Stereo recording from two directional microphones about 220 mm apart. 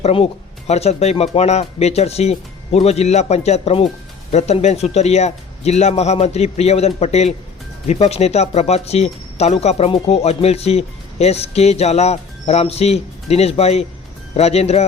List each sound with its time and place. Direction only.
0.0 s speech: 25° left (ahead or behind)